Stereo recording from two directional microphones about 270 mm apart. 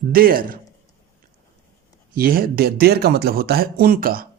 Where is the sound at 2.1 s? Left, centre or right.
Right.